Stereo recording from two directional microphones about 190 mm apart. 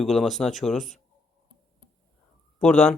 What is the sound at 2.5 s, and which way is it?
Speech, 5° left (ahead or behind).